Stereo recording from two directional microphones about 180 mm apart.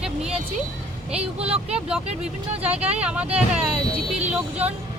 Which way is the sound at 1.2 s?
35° right (ahead or behind).